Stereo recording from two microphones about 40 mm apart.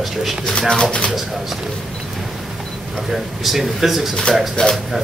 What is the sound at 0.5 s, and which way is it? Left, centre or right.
Speech, left.